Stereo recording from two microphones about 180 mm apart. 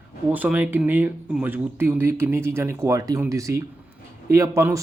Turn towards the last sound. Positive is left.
turn(degrees=-15)  # may be behind; listen again after turning